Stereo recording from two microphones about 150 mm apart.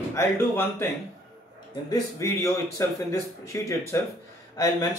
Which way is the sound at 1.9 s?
20° left (ahead or behind).